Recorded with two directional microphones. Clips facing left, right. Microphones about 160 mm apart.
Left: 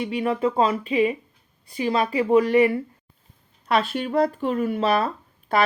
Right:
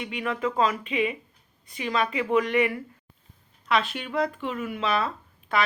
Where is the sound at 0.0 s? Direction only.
35° left (ahead or behind).